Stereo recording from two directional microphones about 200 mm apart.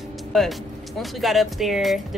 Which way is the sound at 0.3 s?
Centre (ahead or behind).